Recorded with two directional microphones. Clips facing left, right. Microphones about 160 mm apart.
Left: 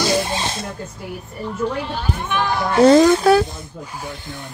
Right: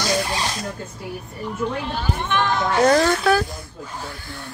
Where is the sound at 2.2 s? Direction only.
10° left (ahead or behind).